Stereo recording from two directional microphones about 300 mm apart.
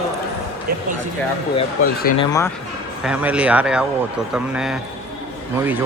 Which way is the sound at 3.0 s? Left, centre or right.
Centre.